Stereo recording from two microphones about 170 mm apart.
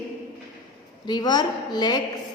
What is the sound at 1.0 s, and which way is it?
Speech, 25° left (ahead or behind).